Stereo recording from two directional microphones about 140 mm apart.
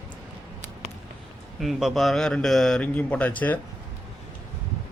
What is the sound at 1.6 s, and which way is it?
Speech, centre (ahead or behind).